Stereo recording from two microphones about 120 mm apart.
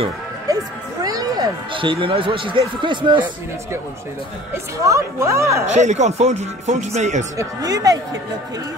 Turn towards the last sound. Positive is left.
turn(degrees=-30)  # may be behind; listen again after turning